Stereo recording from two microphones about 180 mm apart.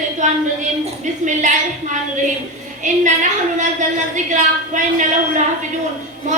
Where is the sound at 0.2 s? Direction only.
40° right (ahead or behind).